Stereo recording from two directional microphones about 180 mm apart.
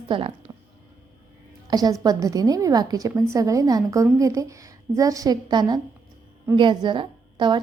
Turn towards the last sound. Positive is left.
turn(degrees=-25)  # may be behind; listen again after turning